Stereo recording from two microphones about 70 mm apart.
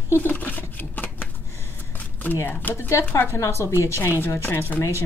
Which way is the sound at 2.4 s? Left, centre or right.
Left.